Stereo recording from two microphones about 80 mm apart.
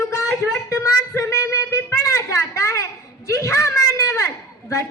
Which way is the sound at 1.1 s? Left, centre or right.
Left.